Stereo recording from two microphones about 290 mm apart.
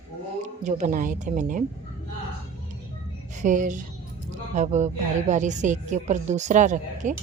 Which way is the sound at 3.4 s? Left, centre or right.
Right.